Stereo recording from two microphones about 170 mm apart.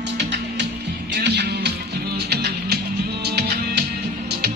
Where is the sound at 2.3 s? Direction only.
70° right (ahead or behind).